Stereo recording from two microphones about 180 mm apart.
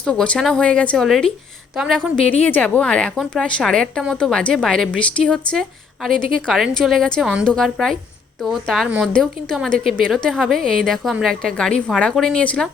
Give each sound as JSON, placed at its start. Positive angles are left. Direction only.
{"t": 0.0, "sound": "a woman's voice", "side_deg": 5}